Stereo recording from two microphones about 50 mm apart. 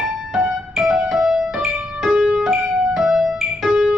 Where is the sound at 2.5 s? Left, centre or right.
Right.